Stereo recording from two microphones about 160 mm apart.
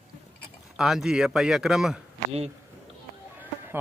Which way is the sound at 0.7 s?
Centre (ahead or behind).